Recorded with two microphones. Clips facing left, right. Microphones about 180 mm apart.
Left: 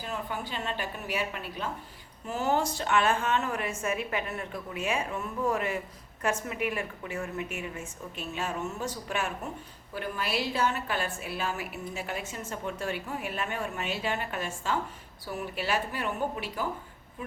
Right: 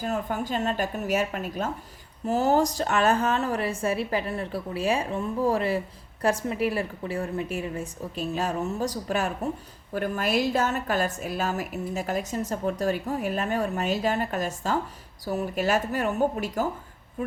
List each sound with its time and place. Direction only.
0.0 s a woman's voice: 45° right (ahead or behind)